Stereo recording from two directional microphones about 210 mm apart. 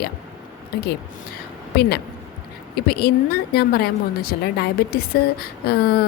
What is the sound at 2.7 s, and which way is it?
A woman's voice, 50° left (ahead or behind).